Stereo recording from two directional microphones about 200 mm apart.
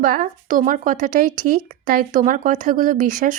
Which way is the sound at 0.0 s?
45° right (ahead or behind).